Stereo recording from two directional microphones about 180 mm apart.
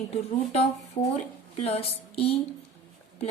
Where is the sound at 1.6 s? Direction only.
35° left (ahead or behind).